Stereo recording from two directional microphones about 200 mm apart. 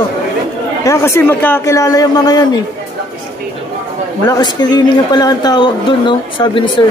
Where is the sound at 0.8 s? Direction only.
15° left (ahead or behind).